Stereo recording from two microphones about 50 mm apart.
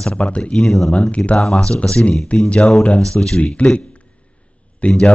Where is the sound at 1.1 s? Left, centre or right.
Left.